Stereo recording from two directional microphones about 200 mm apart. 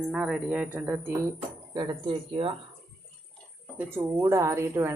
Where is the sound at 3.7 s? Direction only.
10° right (ahead or behind).